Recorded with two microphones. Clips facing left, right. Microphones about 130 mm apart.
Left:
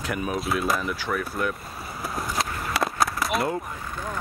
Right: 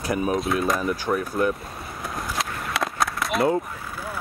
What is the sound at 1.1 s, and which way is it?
Speech, 20° right (ahead or behind).